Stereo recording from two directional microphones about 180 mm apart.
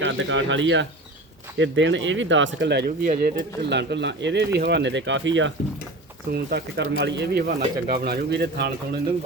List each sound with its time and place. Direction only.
0.0 s speech: 90° right; by 3.4 s 50° right (ahead or behind)
3.7 s speech: 75° right (ahead or behind); by 5.5 s 90° right
6.3 s speech: 65° right (ahead or behind)